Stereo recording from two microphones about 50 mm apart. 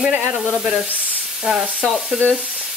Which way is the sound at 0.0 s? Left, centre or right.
Right.